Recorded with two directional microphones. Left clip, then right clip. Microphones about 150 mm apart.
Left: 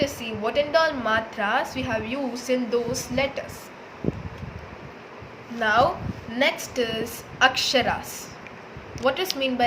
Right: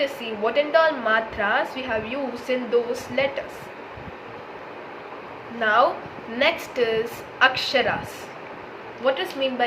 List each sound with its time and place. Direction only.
0.0 s a woman's voice: 45° left (ahead or behind)
5.5 s a woman's voice: 50° left (ahead or behind)
6.4 s a woman's voice: 40° left (ahead or behind)
9.0 s speech: 60° left (ahead or behind)